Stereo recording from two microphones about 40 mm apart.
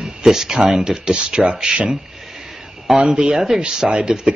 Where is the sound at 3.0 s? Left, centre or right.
Right.